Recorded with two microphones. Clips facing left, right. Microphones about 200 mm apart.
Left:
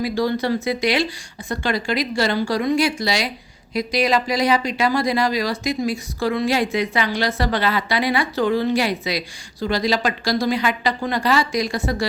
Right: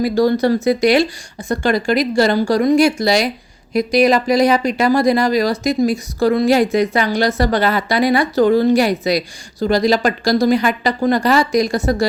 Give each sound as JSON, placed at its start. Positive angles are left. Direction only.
{"t": 0.0, "sound": "speech", "side_deg": -45}